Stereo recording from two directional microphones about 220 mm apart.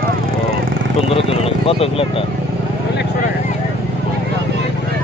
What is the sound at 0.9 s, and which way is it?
Speech, 25° left (ahead or behind).